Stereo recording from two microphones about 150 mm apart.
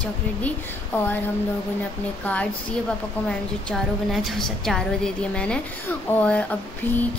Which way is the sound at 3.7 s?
5° left (ahead or behind).